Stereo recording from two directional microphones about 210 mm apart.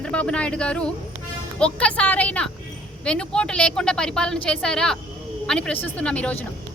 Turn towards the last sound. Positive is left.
turn(degrees=5)  # may be behind; listen again after turning